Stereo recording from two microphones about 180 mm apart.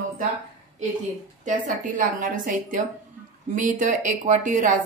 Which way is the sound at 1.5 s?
50° right (ahead or behind).